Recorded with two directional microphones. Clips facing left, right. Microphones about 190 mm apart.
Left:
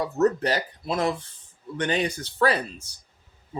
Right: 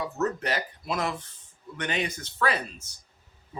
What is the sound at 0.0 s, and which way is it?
Speech, 35° left (ahead or behind).